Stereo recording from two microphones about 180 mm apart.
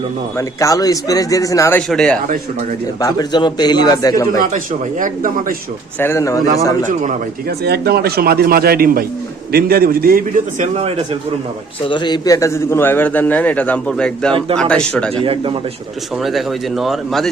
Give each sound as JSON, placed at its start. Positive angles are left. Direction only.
{"t": 0.3, "sound": "speech", "side_deg": 15}
{"t": 1.9, "sound": "speech", "side_deg": 5}
{"t": 3.0, "sound": "speech", "side_deg": 20}
{"t": 4.4, "sound": "speech", "side_deg": -50}
{"t": 6.0, "sound": "a man's voice", "side_deg": 15}
{"t": 7.0, "sound": "speech", "side_deg": -60}
{"t": 11.9, "sound": "a man's voice", "side_deg": 25}
{"t": 15.1, "sound": "speech", "side_deg": -30}
{"t": 16.1, "sound": "speech", "side_deg": 0}